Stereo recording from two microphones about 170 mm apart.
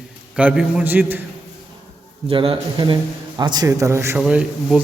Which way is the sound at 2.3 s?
30° right (ahead or behind).